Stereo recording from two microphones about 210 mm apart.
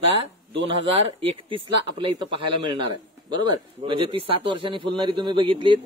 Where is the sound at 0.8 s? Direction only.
25° right (ahead or behind).